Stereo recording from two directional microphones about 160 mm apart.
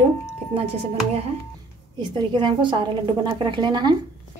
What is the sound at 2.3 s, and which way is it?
A woman's voice, 30° right (ahead or behind).